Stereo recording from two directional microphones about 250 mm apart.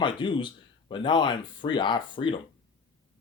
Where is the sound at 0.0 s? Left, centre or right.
Centre.